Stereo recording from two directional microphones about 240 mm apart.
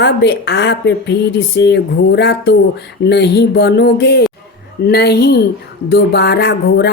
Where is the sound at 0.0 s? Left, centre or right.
Left.